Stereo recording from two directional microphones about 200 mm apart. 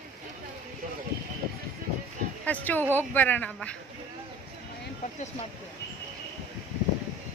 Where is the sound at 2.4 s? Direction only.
10° left (ahead or behind).